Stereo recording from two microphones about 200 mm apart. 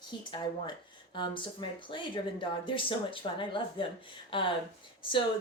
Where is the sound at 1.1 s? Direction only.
25° left (ahead or behind).